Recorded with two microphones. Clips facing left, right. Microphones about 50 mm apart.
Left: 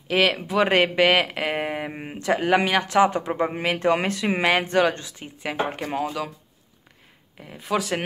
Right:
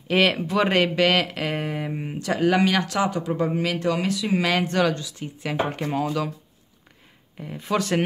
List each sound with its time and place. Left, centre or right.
0.1 s speech: centre; by 4.5 s left
4.5 s speech: left
4.9 s speech: left
5.4 s speech: centre
5.9 s speech: centre
7.3 s speech: centre